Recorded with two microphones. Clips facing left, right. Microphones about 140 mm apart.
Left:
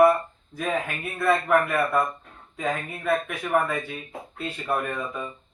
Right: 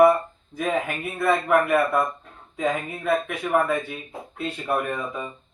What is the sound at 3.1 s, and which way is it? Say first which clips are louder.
A man's voice: right 1 dB; 10° right (ahead or behind).